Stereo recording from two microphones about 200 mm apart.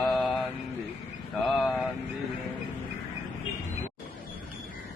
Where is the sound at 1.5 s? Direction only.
Centre (ahead or behind).